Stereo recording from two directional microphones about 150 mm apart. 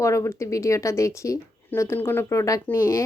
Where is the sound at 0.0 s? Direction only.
20° left (ahead or behind).